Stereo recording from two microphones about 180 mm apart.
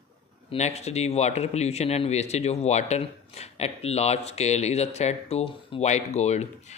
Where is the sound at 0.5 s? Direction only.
35° left (ahead or behind).